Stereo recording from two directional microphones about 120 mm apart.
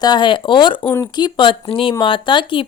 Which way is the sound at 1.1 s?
40° left (ahead or behind).